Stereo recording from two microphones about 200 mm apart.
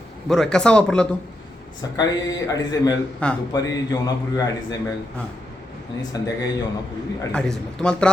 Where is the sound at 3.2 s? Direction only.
5° left (ahead or behind).